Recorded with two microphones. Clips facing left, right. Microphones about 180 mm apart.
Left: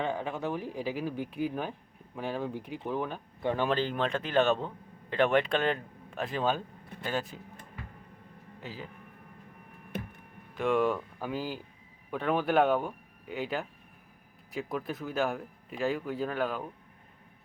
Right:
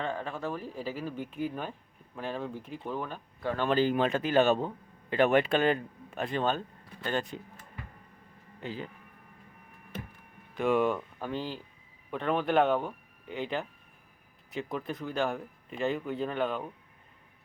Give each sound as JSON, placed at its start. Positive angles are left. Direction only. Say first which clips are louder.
{"t": 0.0, "sound": "speech", "louder": "left 2 dB", "side_deg": 15}
{"t": 3.7, "sound": "speech", "louder": "right 3 dB", "side_deg": -10}
{"t": 8.6, "sound": "speech", "louder": "right 4 dB", "side_deg": 5}
{"t": 10.5, "sound": "speech", "louder": "right 1 dB", "side_deg": 0}